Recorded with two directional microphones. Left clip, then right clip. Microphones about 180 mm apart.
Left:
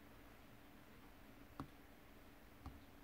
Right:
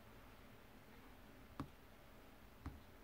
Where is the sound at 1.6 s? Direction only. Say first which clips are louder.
Right 2 dB; 15° right (ahead or behind).